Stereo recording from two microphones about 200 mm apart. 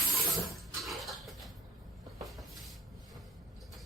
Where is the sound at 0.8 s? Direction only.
Centre (ahead or behind).